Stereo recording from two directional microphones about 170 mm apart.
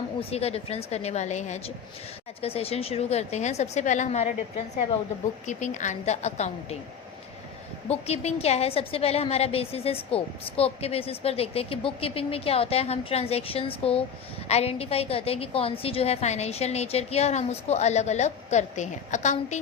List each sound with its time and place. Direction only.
0.2 s a woman's voice: 35° left (ahead or behind)
5.5 s a woman's voice: 45° left (ahead or behind)
7.9 s a woman's voice: 40° left (ahead or behind)